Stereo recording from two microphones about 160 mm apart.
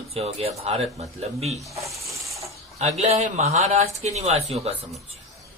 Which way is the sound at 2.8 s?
45° right (ahead or behind).